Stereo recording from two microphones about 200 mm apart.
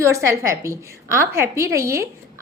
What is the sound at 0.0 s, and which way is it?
A woman's voice, 15° right (ahead or behind).